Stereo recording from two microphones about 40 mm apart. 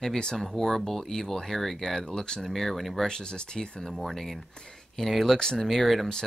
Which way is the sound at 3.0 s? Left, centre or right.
Centre.